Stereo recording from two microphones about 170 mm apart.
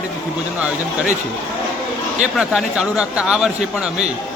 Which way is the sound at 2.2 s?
5° right (ahead or behind).